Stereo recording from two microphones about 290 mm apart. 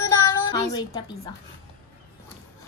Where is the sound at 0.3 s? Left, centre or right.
Centre.